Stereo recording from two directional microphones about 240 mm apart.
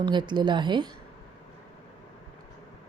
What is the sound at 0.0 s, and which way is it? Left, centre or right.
Speech, centre.